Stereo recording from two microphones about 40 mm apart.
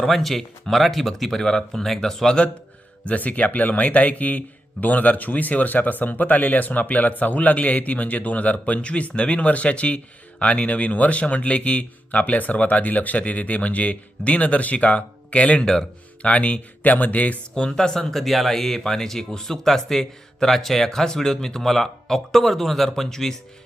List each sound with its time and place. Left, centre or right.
0.0 s speech: centre
3.0 s speech: left
15.6 s speech: centre
16.3 s speech: left
16.8 s speech: left
17.5 s speech: centre